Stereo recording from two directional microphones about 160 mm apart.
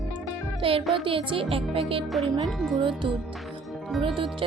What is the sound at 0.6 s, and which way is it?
Speech, 35° right (ahead or behind).